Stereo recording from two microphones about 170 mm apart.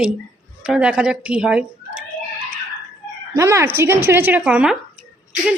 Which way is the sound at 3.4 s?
15° right (ahead or behind).